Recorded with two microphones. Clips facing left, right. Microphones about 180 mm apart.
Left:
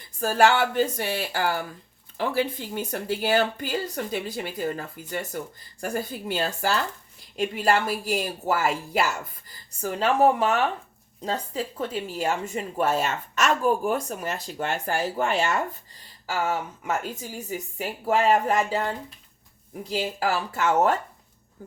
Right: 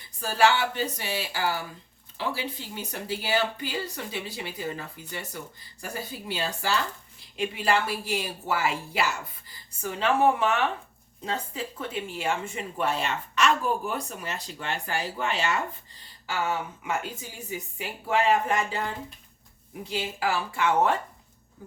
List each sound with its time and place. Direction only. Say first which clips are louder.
0.2 s a woman's voice: left 3 dB; 50° left (ahead or behind)
19.9 s a woman's voice: left 3 dB; 40° left (ahead or behind)